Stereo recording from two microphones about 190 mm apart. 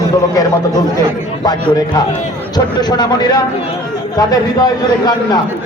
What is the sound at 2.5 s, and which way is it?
A man's voice, 20° left (ahead or behind).